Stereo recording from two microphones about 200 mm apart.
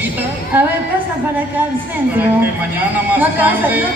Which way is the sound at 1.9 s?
10° right (ahead or behind).